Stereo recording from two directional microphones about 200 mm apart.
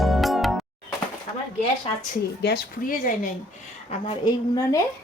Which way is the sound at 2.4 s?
55° left (ahead or behind).